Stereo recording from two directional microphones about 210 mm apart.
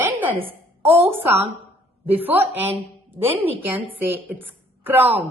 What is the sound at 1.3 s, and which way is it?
Speech, 30° right (ahead or behind).